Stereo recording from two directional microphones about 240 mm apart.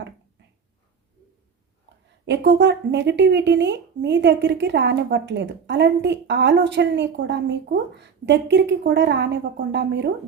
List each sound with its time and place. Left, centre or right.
2.2 s speech: right